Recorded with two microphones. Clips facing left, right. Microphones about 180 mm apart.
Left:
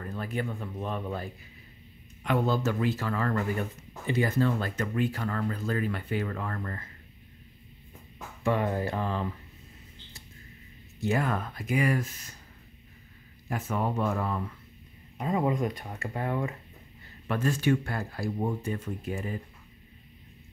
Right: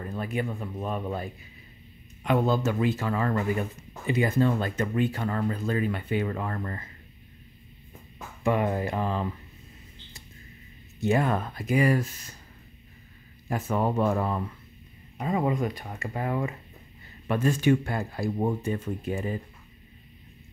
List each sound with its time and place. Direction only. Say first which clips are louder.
0.0 s speech: right 3 dB; 15° right (ahead or behind)
8.5 s speech: right 2 dB; 15° right (ahead or behind)
11.0 s speech: right 4 dB; 25° right (ahead or behind)
13.5 s speech: right 4 dB; 35° right (ahead or behind)
15.1 s speech: right 1 dB; 5° right (ahead or behind); by 19.4 s 25° right (ahead or behind)